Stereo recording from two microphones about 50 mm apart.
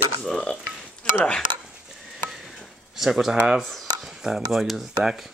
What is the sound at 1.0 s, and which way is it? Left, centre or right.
Dishes, left.